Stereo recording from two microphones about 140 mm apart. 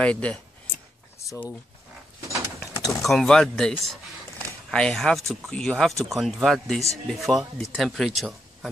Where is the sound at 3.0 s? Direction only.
5° left (ahead or behind).